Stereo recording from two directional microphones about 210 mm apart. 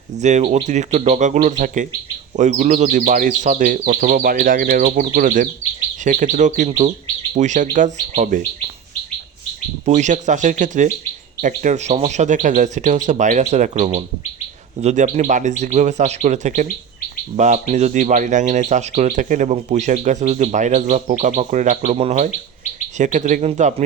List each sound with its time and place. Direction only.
0.2 s speech: 35° right (ahead or behind)
9.8 s speech: 35° right (ahead or behind)